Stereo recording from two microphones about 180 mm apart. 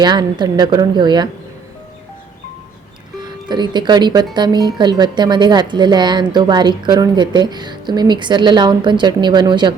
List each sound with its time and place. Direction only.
0.0 s a woman's voice: 25° right (ahead or behind)
3.2 s a woman's voice: 25° right (ahead or behind)